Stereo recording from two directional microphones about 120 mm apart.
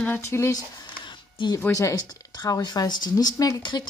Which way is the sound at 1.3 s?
40° left (ahead or behind).